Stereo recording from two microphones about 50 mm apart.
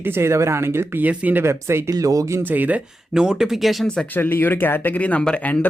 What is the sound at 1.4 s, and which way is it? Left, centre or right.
Speech, right.